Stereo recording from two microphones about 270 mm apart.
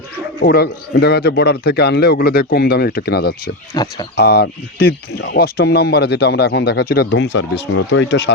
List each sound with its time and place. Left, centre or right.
0.3 s speech: left
3.7 s speech: centre
4.2 s speech: left